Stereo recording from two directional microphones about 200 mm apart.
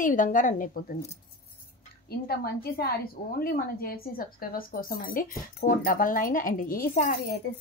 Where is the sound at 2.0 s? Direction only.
50° left (ahead or behind).